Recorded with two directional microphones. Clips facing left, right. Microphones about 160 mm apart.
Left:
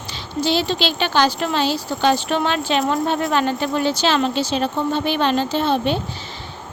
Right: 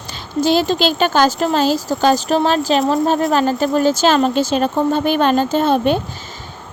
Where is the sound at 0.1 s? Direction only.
45° right (ahead or behind).